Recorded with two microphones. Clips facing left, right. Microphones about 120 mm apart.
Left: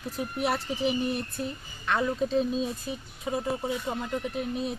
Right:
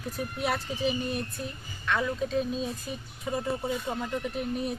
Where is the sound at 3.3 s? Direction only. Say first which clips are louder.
Left 1 dB; 20° left (ahead or behind).